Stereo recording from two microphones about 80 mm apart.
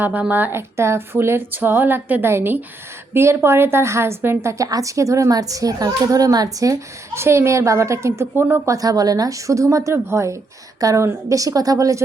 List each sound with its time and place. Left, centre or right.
0.0 s a woman's voice: centre; by 7.2 s right
7.2 s a woman's voice: right
8.6 s a woman's voice: right
10.8 s a woman's voice: right